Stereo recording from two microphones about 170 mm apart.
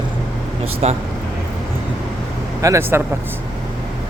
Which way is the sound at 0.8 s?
40° right (ahead or behind).